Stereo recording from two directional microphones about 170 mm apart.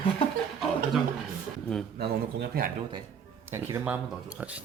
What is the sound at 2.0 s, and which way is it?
Speech, 75° right (ahead or behind).